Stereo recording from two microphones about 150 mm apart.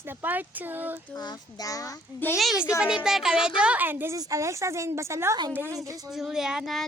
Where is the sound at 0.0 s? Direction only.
15° right (ahead or behind).